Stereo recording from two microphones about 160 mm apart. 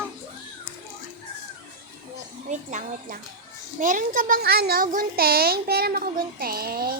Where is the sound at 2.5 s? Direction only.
50° right (ahead or behind); by 7.0 s 70° right (ahead or behind).